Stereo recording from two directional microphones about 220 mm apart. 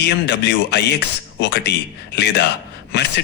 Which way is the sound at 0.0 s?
50° left (ahead or behind).